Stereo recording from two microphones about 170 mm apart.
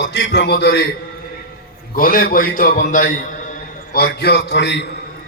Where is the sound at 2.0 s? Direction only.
55° left (ahead or behind); by 4.9 s 90° left.